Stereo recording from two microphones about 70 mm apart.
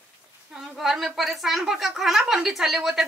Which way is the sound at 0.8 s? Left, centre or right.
Centre.